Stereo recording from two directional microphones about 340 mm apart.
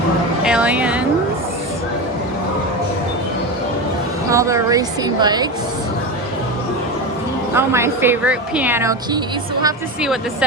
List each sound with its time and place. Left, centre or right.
0.4 s speech: centre
4.3 s a woman's voice: centre
7.5 s a woman's voice: centre